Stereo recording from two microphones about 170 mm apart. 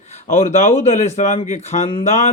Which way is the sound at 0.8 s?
40° left (ahead or behind).